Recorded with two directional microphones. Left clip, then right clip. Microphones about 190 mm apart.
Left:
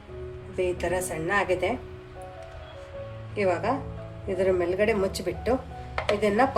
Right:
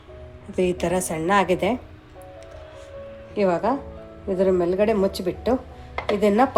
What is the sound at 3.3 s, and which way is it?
A woman's voice, 35° right (ahead or behind).